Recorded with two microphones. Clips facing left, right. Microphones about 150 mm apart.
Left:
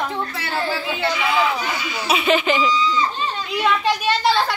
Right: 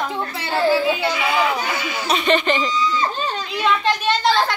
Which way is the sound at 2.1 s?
5° left (ahead or behind).